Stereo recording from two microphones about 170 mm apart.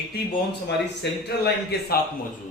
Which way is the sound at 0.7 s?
80° left.